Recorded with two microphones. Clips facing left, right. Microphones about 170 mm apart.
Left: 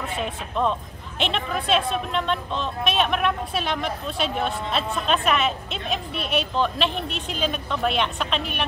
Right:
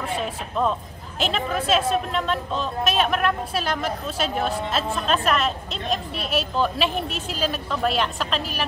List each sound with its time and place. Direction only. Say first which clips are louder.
0.0 s speech: right 1 dB; centre (ahead or behind)